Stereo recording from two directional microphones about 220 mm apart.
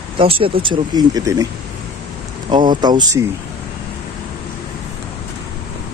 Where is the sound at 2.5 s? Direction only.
20° right (ahead or behind).